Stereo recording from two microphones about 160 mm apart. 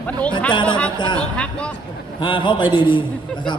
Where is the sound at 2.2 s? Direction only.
30° left (ahead or behind).